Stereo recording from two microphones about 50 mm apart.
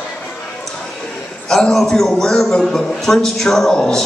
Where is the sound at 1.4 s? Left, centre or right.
Centre.